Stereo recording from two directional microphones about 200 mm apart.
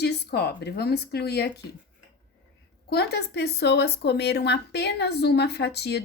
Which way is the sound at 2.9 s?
55° left (ahead or behind).